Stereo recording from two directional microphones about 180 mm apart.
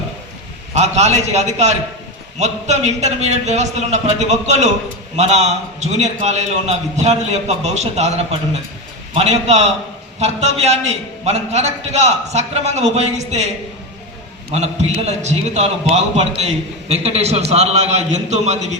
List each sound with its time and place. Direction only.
0.7 s a man's voice: 40° right (ahead or behind)
14.5 s a man's voice: 35° right (ahead or behind)